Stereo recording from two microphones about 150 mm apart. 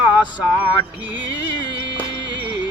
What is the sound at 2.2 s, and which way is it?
Music, 30° left (ahead or behind).